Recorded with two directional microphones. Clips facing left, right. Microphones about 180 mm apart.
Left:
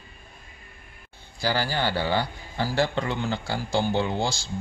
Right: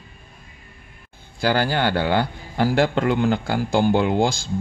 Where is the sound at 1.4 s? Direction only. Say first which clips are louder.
Right 6 dB; 55° right (ahead or behind).